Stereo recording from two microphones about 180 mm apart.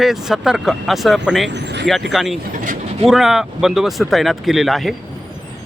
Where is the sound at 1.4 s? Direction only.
75° right (ahead or behind).